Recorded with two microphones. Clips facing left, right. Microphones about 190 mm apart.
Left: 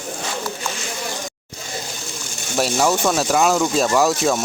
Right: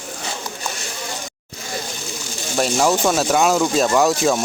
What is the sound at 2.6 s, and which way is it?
Speech, centre (ahead or behind).